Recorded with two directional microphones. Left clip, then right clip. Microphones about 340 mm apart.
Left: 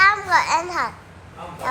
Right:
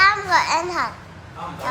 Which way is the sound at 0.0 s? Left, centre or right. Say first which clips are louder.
Even; centre.